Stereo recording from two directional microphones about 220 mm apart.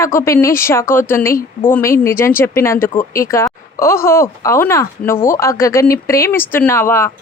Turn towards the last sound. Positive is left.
turn(degrees=10)  # may be behind; listen again after turning